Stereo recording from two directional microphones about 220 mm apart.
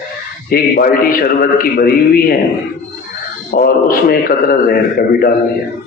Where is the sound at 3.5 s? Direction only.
45° left (ahead or behind).